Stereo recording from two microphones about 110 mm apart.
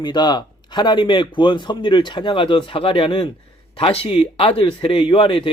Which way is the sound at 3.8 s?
65° left (ahead or behind).